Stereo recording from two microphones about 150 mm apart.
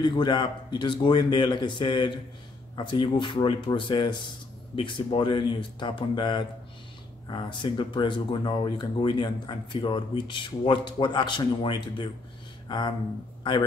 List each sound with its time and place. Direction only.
0.0 s speech: 30° left (ahead or behind)